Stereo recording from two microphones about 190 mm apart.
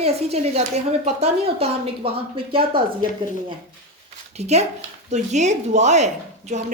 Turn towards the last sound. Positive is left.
turn(degrees=-40)  # may be behind; listen again after turning